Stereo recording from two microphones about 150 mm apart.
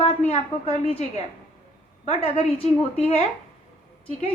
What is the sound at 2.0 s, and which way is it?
Speech, 40° left (ahead or behind).